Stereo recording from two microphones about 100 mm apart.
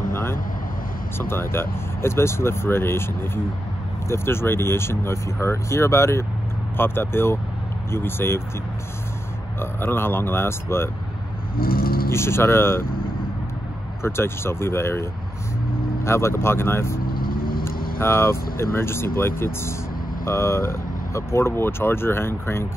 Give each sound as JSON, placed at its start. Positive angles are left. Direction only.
{"t": 0.1, "sound": "vehicle", "side_deg": 25}
{"t": 1.1, "sound": "speech", "side_deg": 25}
{"t": 9.6, "sound": "speech", "side_deg": 20}
{"t": 12.1, "sound": "speech", "side_deg": 25}
{"t": 14.0, "sound": "speech", "side_deg": 25}